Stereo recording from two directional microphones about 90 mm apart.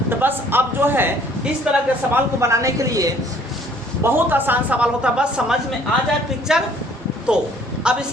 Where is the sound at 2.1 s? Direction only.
35° right (ahead or behind).